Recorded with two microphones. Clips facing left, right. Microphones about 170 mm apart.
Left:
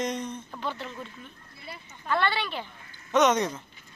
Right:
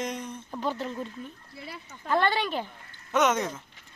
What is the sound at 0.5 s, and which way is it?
Speech, 40° right (ahead or behind).